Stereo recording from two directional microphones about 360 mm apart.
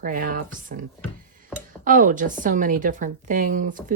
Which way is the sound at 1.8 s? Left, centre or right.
Right.